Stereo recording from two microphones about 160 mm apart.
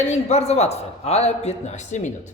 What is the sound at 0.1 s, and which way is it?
Speech, 45° left (ahead or behind).